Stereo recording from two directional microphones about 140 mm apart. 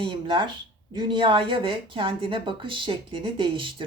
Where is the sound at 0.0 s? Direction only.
35° right (ahead or behind).